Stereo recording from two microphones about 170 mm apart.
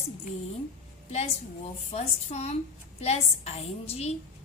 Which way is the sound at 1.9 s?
40° left (ahead or behind).